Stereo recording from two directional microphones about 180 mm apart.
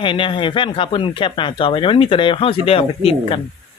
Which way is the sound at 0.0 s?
30° left (ahead or behind).